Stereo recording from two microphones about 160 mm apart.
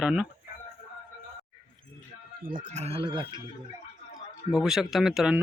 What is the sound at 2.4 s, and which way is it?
Speech, 55° right (ahead or behind).